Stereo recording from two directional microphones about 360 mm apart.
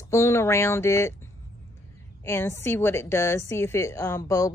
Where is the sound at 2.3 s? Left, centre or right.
Centre.